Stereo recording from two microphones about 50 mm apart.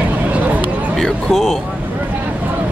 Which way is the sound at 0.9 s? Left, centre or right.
Centre.